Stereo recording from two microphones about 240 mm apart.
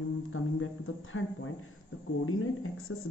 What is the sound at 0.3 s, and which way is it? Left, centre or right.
Speech, left.